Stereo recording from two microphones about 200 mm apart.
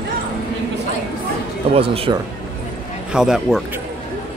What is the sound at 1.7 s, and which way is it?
Speech, 30° right (ahead or behind).